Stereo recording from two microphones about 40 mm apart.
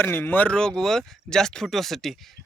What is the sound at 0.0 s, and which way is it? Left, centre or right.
Speech, left.